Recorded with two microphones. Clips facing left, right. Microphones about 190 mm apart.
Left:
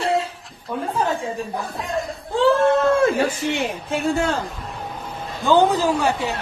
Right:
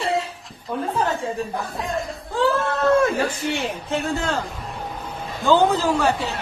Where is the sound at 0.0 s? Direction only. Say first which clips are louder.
Left 2 dB; centre (ahead or behind).